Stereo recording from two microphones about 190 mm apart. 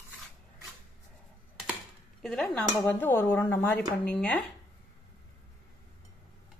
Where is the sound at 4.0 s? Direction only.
5° left (ahead or behind).